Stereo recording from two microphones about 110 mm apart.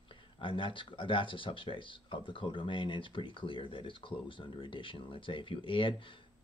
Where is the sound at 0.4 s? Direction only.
50° left (ahead or behind).